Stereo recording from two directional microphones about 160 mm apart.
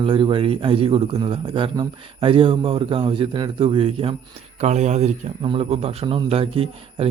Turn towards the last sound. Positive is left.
turn(degrees=-35)  # may be behind; listen again after turning